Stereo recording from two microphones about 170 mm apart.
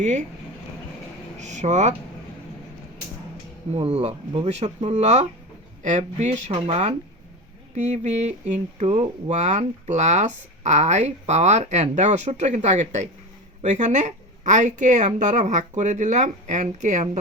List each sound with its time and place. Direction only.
1.4 s speech: 45° right (ahead or behind)
3.8 s speech: 40° right (ahead or behind)
7.8 s speech: 45° right (ahead or behind)